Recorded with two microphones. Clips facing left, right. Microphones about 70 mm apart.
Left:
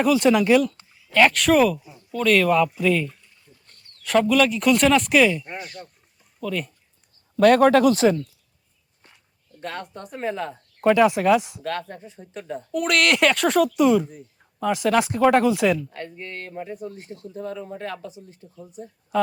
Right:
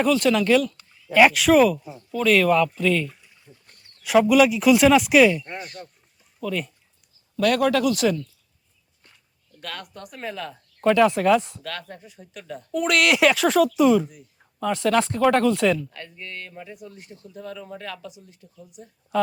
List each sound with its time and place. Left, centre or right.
0.2 s speech: centre
1.1 s speech: centre
3.4 s speech: centre
5.4 s speech: centre
7.3 s speech: left
9.6 s speech: left
10.8 s speech: centre
11.6 s speech: left
12.7 s speech: centre
15.9 s speech: left